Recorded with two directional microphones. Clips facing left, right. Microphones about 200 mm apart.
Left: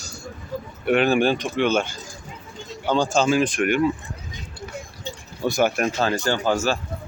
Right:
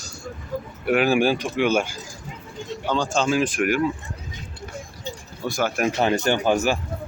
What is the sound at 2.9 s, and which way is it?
Speech, 5° left (ahead or behind).